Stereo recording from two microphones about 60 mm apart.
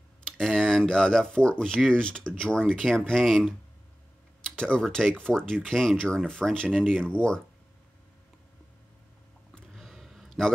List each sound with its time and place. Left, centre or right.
0.4 s speech: centre
4.6 s speech: centre
9.8 s a sound: centre